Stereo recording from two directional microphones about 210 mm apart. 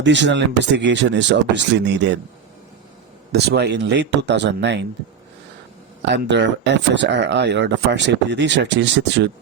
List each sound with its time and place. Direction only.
0.0 s speech: 55° right (ahead or behind)
3.3 s speech: 50° right (ahead or behind)
6.1 s speech: 55° right (ahead or behind)